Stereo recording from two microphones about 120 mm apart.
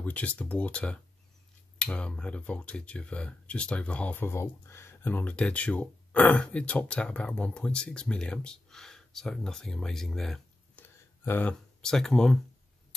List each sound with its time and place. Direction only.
0.0 s speech: 10° left (ahead or behind)
11.2 s speech: 15° left (ahead or behind)
11.8 s speech: 5° left (ahead or behind)